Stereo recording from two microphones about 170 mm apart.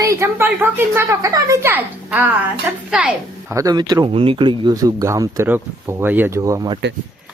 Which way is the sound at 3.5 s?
20° right (ahead or behind).